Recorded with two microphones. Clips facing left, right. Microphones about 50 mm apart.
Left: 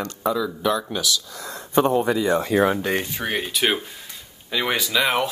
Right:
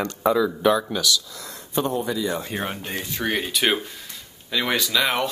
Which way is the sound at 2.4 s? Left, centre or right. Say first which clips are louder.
Left 9 dB; left.